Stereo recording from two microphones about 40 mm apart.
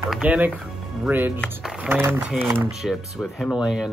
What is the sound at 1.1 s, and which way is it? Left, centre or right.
Speech, right.